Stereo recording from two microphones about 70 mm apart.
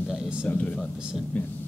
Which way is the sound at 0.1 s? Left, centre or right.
Centre.